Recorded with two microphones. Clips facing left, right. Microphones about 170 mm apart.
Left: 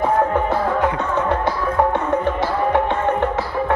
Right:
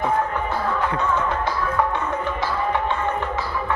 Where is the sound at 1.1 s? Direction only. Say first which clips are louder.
Left 4 dB; 65° left (ahead or behind).